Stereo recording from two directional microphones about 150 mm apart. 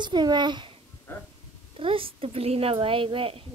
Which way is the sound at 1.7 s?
35° right (ahead or behind).